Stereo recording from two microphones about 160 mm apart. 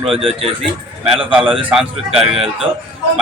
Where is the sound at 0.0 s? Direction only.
Centre (ahead or behind).